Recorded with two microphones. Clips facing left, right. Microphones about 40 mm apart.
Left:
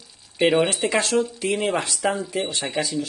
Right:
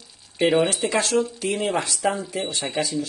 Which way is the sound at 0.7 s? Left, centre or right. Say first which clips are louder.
Left 1 dB; left.